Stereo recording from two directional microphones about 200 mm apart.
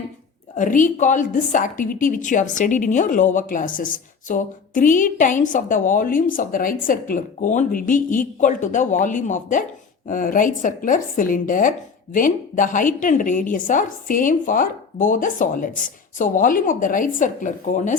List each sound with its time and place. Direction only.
0.5 s a woman's voice: 40° left (ahead or behind)